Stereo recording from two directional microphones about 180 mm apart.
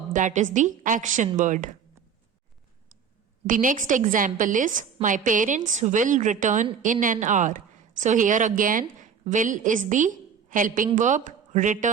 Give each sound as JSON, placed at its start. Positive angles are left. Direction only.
{"t": 0.1, "sound": "a woman's voice", "side_deg": -45}
{"t": 3.4, "sound": "a woman's voice", "side_deg": -45}